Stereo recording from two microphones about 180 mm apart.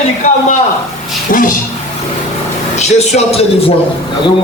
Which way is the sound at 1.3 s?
50° left (ahead or behind).